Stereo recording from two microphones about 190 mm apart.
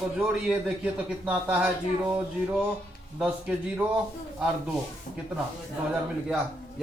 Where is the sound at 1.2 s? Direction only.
5° right (ahead or behind).